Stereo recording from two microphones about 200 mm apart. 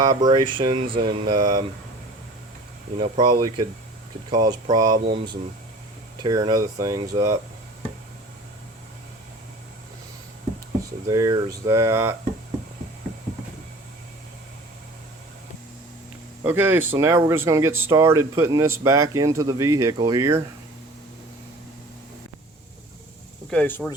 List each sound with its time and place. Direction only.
0.0 s speech: 20° right (ahead or behind)
3.0 s speech: 20° right (ahead or behind)
11.1 s speech: 15° right (ahead or behind)
16.4 s speech: 10° right (ahead or behind)
23.5 s speech: 5° left (ahead or behind)